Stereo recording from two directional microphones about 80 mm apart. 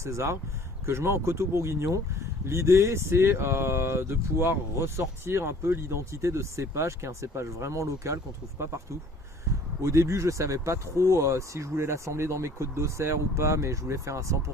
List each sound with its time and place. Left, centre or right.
0.0 s speech: right
9.8 s speech: right